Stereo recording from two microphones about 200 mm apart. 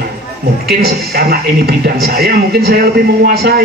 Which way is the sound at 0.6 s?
50° right (ahead or behind).